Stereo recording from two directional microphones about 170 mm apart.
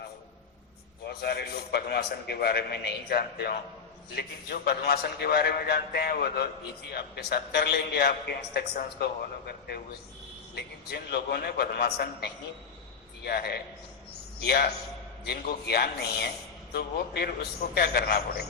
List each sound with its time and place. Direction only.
1.0 s a man's voice: 70° left (ahead or behind)
8.7 s a man's voice: 55° left (ahead or behind)